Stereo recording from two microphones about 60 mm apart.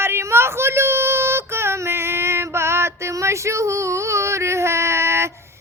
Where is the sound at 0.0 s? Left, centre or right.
Right.